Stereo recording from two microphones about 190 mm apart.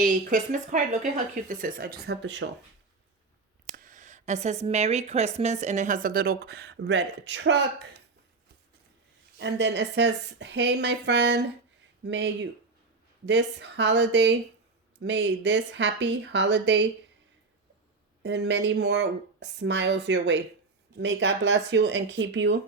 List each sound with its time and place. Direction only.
0.0 s speech: 45° right (ahead or behind); by 2.5 s 70° right (ahead or behind)
3.7 s speech: 45° right (ahead or behind); by 7.9 s 75° right (ahead or behind)
9.4 s speech: 65° right (ahead or behind)
18.2 s speech: 65° right (ahead or behind)